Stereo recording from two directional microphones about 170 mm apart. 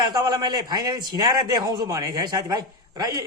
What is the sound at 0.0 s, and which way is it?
A man's voice, 25° right (ahead or behind).